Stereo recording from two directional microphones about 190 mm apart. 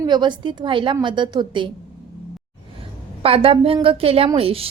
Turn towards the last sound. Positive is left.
turn(degrees=-30)  # may be behind; listen again after turning